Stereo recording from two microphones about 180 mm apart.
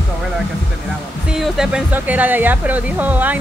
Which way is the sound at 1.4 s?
5° right (ahead or behind).